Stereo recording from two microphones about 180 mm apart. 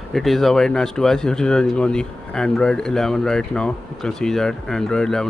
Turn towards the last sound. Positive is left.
turn(degrees=5)  # may be behind; listen again after turning